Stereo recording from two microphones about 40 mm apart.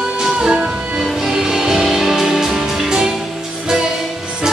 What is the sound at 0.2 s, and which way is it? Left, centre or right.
Music, centre.